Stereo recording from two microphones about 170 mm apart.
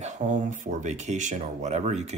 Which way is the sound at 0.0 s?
45° right (ahead or behind).